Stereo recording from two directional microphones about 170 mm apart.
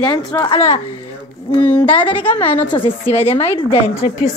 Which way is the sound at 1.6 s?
30° left (ahead or behind).